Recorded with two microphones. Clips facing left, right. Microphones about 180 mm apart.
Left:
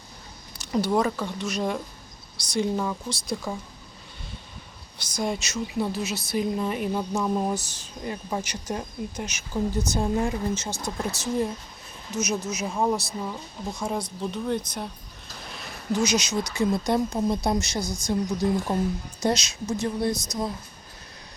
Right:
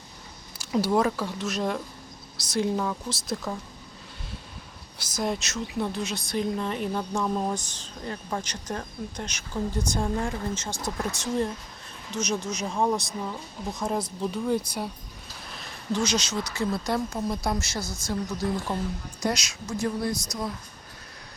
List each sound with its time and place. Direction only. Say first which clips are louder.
0.6 s speech: even; 5° right (ahead or behind)
5.1 s a woman's voice: left 1 dB; centre (ahead or behind)
15.9 s a woman's voice: left 2 dB; 10° left (ahead or behind)